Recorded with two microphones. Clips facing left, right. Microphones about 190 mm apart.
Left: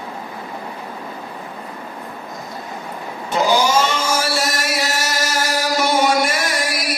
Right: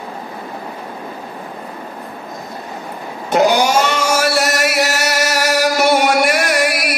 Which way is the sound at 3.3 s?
65° right (ahead or behind).